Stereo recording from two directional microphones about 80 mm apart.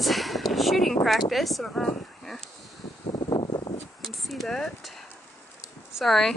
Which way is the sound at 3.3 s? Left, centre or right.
Left.